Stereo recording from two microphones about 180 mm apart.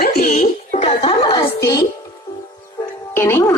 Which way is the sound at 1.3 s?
20° left (ahead or behind).